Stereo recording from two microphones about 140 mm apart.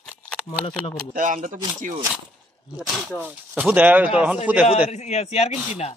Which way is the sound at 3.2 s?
10° right (ahead or behind).